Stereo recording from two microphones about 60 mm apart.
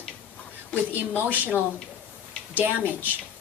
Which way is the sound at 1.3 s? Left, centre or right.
Right.